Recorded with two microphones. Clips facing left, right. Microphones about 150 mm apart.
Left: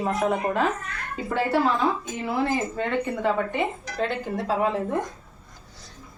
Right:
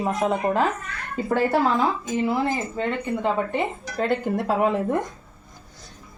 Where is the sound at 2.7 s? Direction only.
25° right (ahead or behind).